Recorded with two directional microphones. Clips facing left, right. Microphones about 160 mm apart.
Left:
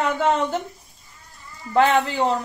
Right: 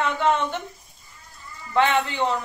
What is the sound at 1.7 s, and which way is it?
Speech, 35° left (ahead or behind).